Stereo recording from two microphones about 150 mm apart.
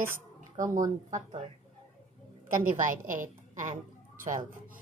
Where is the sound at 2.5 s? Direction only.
65° right (ahead or behind).